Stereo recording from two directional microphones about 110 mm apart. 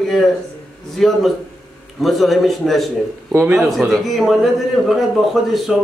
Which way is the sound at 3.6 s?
5° right (ahead or behind).